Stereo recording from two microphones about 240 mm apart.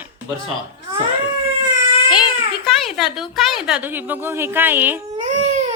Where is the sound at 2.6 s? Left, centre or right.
Centre.